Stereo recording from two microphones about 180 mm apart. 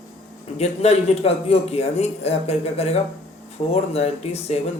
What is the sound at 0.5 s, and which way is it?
Speech, 35° left (ahead or behind).